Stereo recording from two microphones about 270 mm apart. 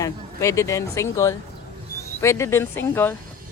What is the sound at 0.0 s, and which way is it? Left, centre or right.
Speech, centre.